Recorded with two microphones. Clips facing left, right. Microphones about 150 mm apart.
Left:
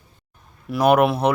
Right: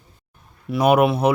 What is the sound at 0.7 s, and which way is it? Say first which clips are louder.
Speech: even; 5° right (ahead or behind).